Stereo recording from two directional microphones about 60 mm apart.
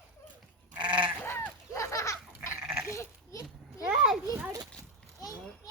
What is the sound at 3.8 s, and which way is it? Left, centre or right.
Children playing, centre.